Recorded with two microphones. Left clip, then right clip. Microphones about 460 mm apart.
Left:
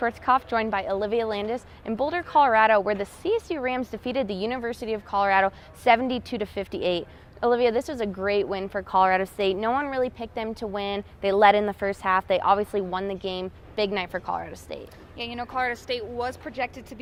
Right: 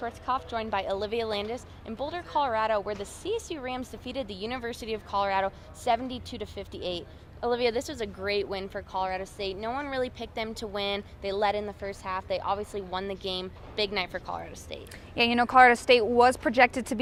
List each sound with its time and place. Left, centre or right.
0.0 s a woman's voice: left
15.1 s speech: right